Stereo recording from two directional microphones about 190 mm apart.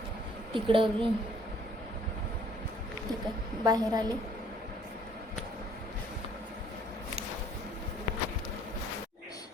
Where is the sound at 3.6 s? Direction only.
20° right (ahead or behind).